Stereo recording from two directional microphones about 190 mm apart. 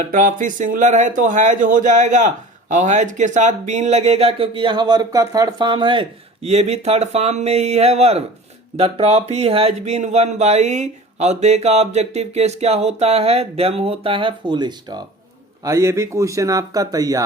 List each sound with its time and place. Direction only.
0.0 s speech: 45° right (ahead or behind); by 17.2 s 20° right (ahead or behind)